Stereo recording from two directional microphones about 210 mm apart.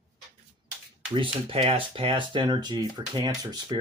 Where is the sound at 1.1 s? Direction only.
25° right (ahead or behind).